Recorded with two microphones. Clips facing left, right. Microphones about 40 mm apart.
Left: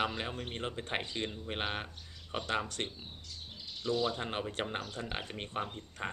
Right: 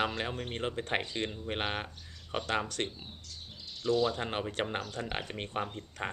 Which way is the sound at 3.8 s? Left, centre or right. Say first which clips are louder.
Right 4 dB; centre.